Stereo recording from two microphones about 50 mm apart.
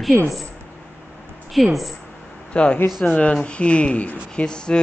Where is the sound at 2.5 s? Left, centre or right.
Left.